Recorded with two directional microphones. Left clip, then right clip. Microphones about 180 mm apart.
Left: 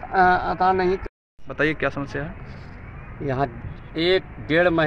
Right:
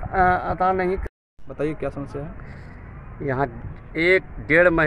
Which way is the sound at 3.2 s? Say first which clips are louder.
Even; 5° right (ahead or behind).